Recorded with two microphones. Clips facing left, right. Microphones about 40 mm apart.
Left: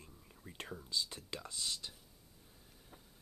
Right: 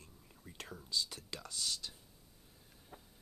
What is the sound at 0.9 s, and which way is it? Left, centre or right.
Speech, left.